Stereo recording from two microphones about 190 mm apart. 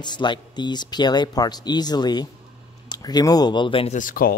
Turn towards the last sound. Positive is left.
turn(degrees=45)  # may be behind; listen again after turning